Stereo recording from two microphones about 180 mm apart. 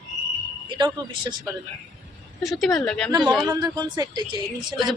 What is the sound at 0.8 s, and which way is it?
Speech, 25° right (ahead or behind).